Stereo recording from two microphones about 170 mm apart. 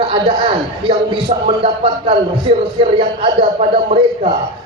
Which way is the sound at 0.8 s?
30° right (ahead or behind).